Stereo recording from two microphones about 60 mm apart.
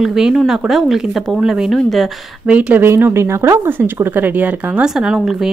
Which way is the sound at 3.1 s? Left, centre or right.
Right.